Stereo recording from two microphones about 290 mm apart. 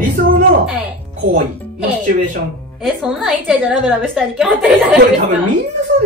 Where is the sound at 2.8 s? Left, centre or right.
Centre.